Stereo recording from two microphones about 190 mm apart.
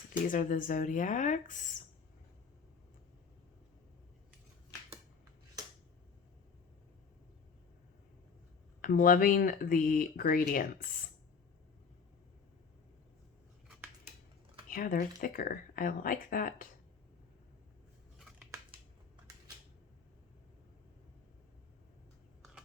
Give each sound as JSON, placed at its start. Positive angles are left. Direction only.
{"t": 0.3, "sound": "speech", "side_deg": 45}
{"t": 8.8, "sound": "speech", "side_deg": 45}
{"t": 14.7, "sound": "speech", "side_deg": 45}